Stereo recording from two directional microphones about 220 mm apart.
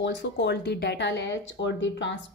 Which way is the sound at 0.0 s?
55° left (ahead or behind).